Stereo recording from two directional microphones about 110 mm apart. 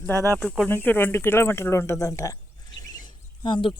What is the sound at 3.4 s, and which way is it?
Speech, 45° left (ahead or behind).